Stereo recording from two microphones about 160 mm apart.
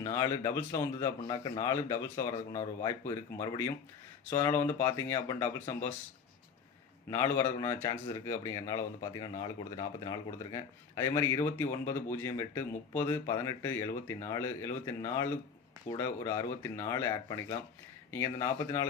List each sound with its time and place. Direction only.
0.0 s speech: 20° left (ahead or behind)
7.1 s speech: 15° left (ahead or behind)